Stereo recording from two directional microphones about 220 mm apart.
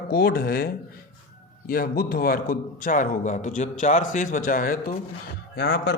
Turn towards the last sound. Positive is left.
turn(degrees=50)  # may be behind; listen again after turning